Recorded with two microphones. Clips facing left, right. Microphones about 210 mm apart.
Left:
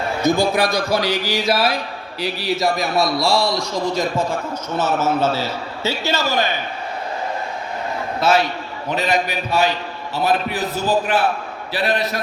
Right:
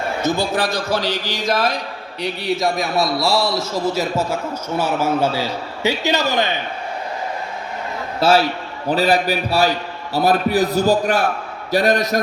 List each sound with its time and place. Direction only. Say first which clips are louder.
0.2 s a man's voice: left 4 dB; 10° left (ahead or behind); by 6.5 s 20° right (ahead or behind)
8.2 s a man's voice: right 2 dB; 30° right (ahead or behind)